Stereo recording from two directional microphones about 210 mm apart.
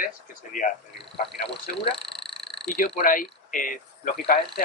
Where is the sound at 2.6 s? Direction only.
45° left (ahead or behind).